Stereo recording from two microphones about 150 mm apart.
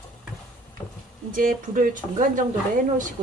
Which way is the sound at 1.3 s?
65° right (ahead or behind).